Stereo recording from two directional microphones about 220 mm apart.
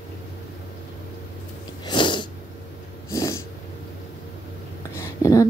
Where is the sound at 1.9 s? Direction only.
20° left (ahead or behind).